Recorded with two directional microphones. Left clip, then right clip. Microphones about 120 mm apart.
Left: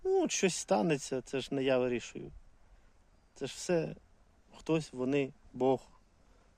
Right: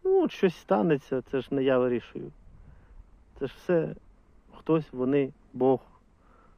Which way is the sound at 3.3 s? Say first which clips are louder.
Right 6 dB; 15° left (ahead or behind).